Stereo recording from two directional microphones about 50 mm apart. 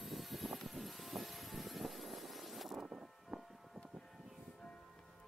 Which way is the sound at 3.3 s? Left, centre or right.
Right.